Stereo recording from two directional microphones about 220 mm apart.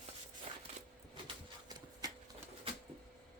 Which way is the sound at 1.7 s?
20° right (ahead or behind).